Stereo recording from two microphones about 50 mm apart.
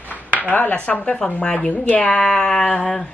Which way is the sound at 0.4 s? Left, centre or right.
Left.